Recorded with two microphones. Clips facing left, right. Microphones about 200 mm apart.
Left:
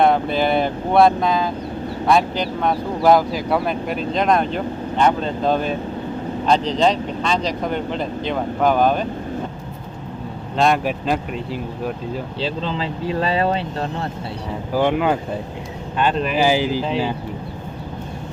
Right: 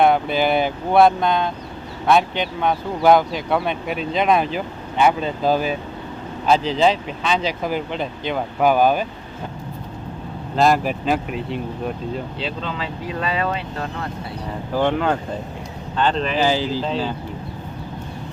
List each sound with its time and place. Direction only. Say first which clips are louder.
0.0 s speech: even; centre (ahead or behind)
10.6 s speech: right 1 dB; centre (ahead or behind)
12.4 s speech: left 3 dB; 30° left (ahead or behind)
14.7 s speech: left 2 dB; 10° left (ahead or behind)